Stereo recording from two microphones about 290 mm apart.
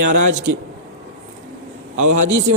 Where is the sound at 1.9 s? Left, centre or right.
Right.